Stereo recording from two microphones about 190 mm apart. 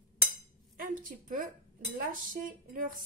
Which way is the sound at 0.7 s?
45° right (ahead or behind).